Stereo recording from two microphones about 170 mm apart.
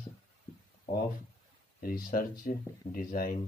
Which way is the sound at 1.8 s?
60° left (ahead or behind).